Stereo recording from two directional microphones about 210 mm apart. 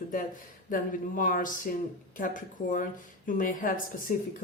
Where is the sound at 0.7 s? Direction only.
40° left (ahead or behind).